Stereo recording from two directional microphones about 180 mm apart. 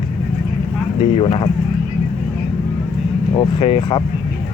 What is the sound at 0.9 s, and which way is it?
Speech, 30° left (ahead or behind).